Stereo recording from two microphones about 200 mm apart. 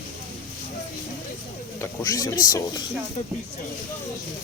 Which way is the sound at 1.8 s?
15° left (ahead or behind).